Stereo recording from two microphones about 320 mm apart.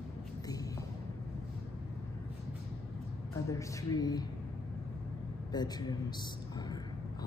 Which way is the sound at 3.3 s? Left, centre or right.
Centre.